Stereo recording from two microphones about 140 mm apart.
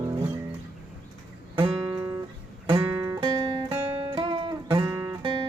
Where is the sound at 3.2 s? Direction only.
35° right (ahead or behind).